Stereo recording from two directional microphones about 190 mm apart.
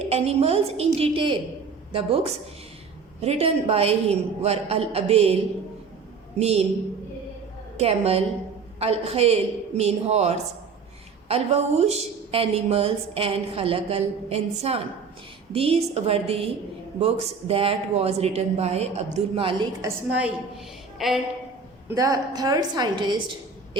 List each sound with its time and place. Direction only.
0.0 s a woman's voice: 35° right (ahead or behind)
6.4 s a woman's voice: 35° right (ahead or behind)
7.8 s a woman's voice: 35° right (ahead or behind)
19.8 s a woman's voice: 5° right (ahead or behind)
21.8 s a woman's voice: 15° right (ahead or behind)